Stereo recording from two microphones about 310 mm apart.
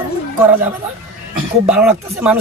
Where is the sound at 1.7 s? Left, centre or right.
Centre.